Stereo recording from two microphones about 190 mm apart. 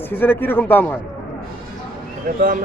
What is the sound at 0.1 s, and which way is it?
Speech, 10° left (ahead or behind).